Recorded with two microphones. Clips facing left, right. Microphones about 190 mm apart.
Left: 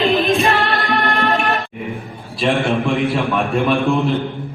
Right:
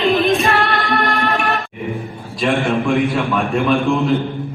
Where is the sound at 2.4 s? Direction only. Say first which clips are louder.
Even; centre (ahead or behind).